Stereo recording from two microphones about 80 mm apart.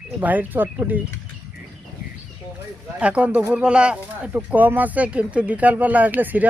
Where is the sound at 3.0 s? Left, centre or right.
Centre.